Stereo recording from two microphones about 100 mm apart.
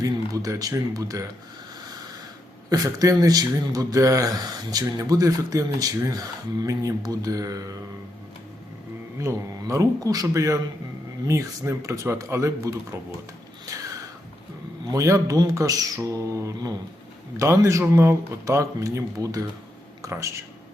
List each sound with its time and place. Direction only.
0.0 s speech: 35° right (ahead or behind)
2.6 s speech: 40° right (ahead or behind)
9.1 s speech: 30° right (ahead or behind)
13.7 s a sound: 35° right (ahead or behind)
14.9 s speech: 35° right (ahead or behind)